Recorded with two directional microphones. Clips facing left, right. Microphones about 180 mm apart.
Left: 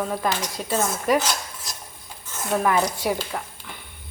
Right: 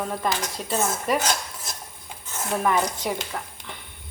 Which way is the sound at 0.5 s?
Centre (ahead or behind).